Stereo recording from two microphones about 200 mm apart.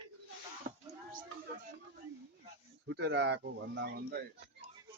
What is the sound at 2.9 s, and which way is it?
Speech, 65° right (ahead or behind).